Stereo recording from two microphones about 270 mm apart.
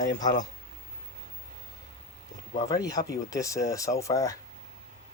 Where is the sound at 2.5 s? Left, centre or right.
Centre.